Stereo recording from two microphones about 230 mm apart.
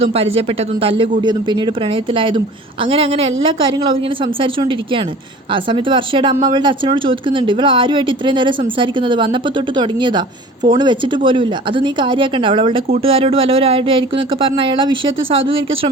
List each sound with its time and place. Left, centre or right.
0.0 s speech: right
5.7 s speech: right